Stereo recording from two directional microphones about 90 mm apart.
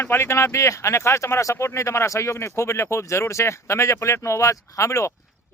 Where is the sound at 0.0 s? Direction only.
25° left (ahead or behind).